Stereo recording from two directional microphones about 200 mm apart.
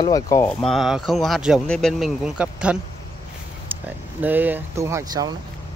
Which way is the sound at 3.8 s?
10° right (ahead or behind).